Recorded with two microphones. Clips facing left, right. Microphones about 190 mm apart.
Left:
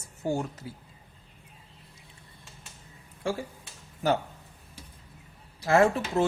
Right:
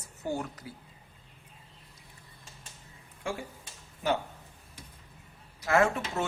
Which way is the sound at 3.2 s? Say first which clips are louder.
Left 5 dB; 35° left (ahead or behind).